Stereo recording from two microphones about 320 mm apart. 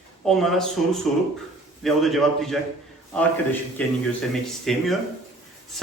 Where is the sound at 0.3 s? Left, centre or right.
Centre.